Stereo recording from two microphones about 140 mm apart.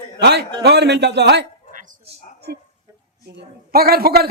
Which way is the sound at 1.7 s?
70° right (ahead or behind).